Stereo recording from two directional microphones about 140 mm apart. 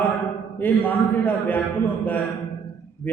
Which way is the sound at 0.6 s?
15° left (ahead or behind).